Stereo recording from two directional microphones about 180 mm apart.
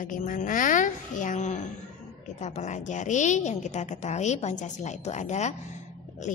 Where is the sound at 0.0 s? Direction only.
45° left (ahead or behind).